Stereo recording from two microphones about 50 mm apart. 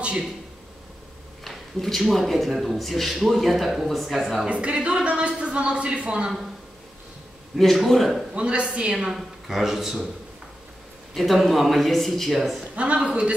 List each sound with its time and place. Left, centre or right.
1.4 s a man's voice: centre
4.5 s speech: right
7.5 s a man's voice: centre
8.4 s speech: right
8.9 s speech: centre
11.1 s a man's voice: centre
12.7 s speech: right